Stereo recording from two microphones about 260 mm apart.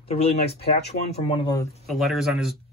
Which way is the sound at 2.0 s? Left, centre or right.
Centre.